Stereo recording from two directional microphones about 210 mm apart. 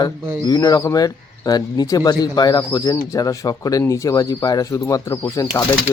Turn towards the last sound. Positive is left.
turn(degrees=20)  # may be behind; listen again after turning